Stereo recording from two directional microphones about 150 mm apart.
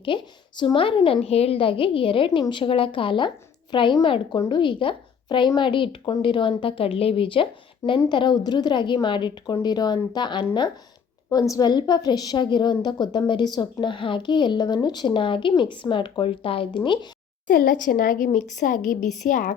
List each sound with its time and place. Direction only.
0.0 s a woman's voice: 35° left (ahead or behind)
17.5 s a woman's voice: 70° left (ahead or behind)